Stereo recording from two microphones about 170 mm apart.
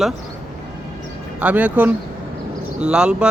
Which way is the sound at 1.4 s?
10° right (ahead or behind).